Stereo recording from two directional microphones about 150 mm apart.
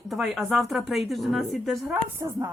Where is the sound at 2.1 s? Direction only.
20° right (ahead or behind).